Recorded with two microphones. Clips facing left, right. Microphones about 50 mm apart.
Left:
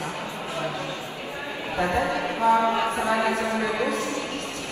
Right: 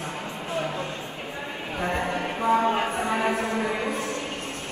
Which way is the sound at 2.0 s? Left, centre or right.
Left.